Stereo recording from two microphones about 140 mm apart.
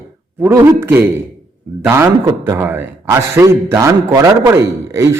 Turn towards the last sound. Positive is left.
turn(degrees=-20)  # may be behind; listen again after turning